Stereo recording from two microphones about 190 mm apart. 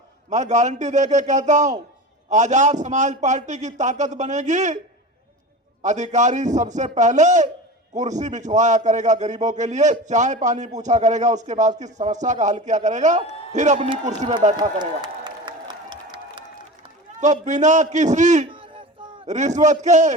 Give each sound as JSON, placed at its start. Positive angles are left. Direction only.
{"t": 0.3, "sound": "a man's voice", "side_deg": -40}
{"t": 5.8, "sound": "a man's voice", "side_deg": -40}
{"t": 13.7, "sound": "speech", "side_deg": -25}
{"t": 14.4, "sound": "a man's voice", "side_deg": -40}
{"t": 14.8, "sound": "applause", "side_deg": -20}
{"t": 17.2, "sound": "a man's voice", "side_deg": -40}
{"t": 18.5, "sound": "a sound", "side_deg": -25}
{"t": 19.2, "sound": "a man's voice", "side_deg": -40}